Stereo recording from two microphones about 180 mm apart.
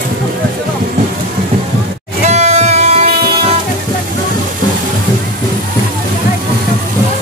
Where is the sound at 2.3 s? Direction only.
40° right (ahead or behind).